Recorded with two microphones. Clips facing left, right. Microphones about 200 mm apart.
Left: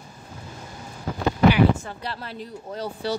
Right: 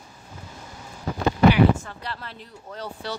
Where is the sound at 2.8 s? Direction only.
35° left (ahead or behind).